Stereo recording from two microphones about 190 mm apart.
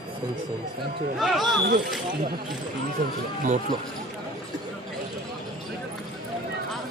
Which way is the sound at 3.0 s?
50° right (ahead or behind).